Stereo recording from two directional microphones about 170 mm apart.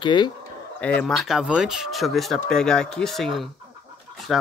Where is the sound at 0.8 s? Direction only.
10° left (ahead or behind).